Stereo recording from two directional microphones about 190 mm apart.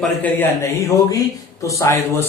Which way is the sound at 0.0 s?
10° left (ahead or behind).